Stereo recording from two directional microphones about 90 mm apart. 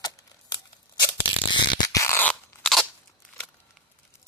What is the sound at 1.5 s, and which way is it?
Mechanisms, 55° left (ahead or behind).